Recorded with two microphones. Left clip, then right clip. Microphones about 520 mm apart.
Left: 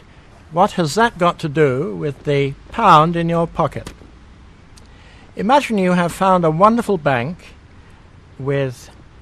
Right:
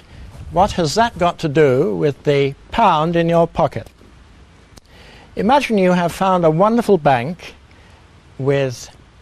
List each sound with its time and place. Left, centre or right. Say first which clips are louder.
0.6 s speech: even; right
5.3 s speech: even; right